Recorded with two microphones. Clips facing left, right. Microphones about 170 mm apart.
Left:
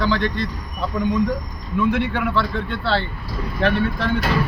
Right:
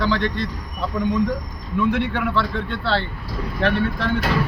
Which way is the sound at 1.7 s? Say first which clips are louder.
Left 1 dB; 5° left (ahead or behind).